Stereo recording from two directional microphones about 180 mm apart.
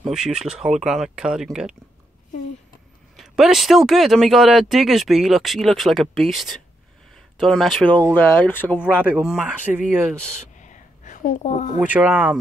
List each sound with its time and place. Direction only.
0.1 s speech: 5° right (ahead or behind)
3.2 s speech: centre (ahead or behind)
8.7 s speech: 5° right (ahead or behind)
10.6 s a sound: 45° left (ahead or behind)
11.8 s speech: 10° right (ahead or behind)